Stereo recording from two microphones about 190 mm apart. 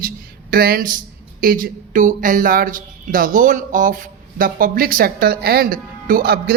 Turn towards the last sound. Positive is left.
turn(degrees=-55)  # may be behind; listen again after turning